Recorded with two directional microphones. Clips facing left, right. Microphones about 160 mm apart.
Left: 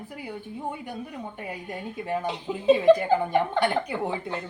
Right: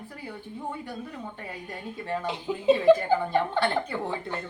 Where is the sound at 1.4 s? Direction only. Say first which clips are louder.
Left 3 dB; 15° left (ahead or behind).